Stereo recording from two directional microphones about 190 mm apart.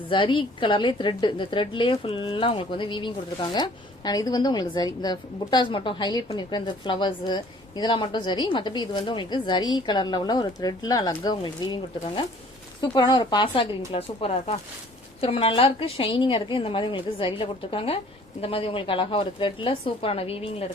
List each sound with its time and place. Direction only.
0.1 s a woman's voice: 25° left (ahead or behind)